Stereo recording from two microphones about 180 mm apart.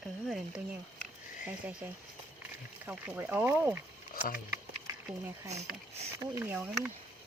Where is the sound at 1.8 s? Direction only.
10° right (ahead or behind).